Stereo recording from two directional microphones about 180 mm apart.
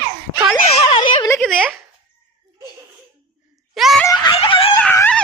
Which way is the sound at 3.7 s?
Centre (ahead or behind).